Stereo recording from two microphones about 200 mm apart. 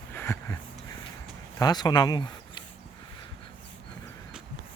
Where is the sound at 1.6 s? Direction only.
20° left (ahead or behind).